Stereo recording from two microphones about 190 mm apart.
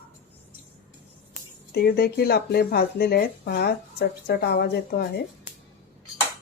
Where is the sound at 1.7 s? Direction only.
55° left (ahead or behind).